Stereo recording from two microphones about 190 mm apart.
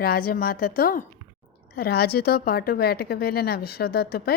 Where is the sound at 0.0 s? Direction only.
50° left (ahead or behind).